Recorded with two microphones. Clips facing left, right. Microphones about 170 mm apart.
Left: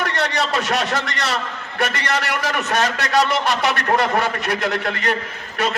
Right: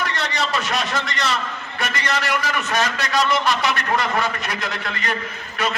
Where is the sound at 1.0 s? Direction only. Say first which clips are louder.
Even; 65° left (ahead or behind).